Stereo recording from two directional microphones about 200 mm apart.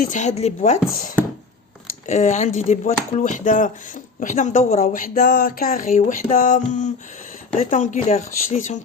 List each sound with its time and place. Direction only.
0.0 s speech: 40° left (ahead or behind)
2.0 s speech: 35° left (ahead or behind)